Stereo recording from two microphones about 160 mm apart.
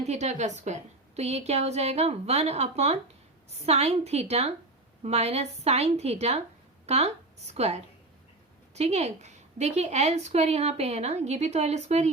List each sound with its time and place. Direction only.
0.0 s a woman's voice: 45° right (ahead or behind)